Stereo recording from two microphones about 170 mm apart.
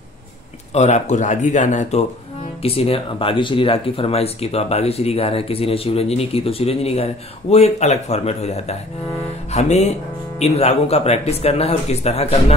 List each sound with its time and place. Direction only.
0.7 s speech: 45° left (ahead or behind)